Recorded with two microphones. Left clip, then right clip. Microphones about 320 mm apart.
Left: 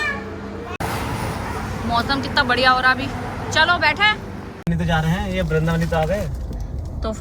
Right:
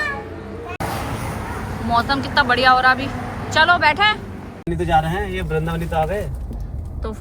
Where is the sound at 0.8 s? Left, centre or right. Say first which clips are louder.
Even; centre.